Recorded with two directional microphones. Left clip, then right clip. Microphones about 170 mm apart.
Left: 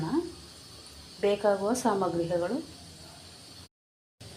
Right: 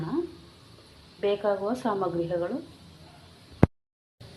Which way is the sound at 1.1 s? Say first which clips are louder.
Even; 15° left (ahead or behind).